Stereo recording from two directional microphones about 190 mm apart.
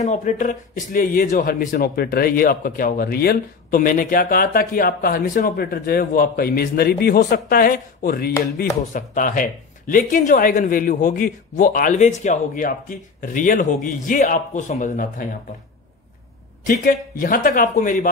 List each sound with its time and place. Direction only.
0.0 s speech: 40° left (ahead or behind)
16.6 s speech: 45° left (ahead or behind)